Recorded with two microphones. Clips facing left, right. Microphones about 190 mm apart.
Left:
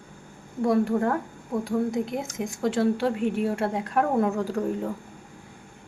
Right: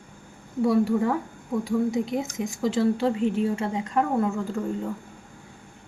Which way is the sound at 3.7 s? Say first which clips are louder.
Even; 5° left (ahead or behind).